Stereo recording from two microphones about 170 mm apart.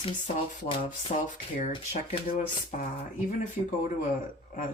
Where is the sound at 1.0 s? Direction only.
45° left (ahead or behind).